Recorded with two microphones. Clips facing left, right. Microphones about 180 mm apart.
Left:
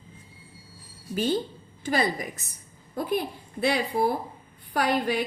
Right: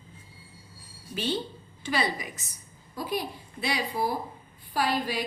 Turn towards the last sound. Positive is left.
turn(degrees=60)  # may be behind; listen again after turning